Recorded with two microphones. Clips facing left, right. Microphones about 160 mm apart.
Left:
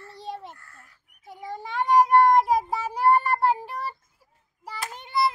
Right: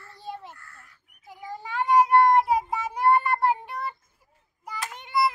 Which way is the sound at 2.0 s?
35° left (ahead or behind).